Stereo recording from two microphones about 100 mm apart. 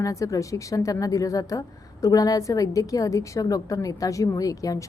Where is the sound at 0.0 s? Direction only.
35° left (ahead or behind).